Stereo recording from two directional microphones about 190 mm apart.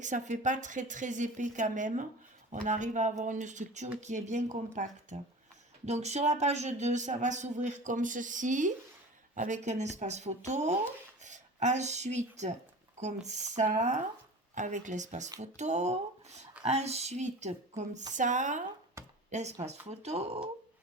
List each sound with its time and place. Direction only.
0.0 s speech: 40° right (ahead or behind)
19.0 s a sound: 15° right (ahead or behind)
19.3 s speech: 35° right (ahead or behind)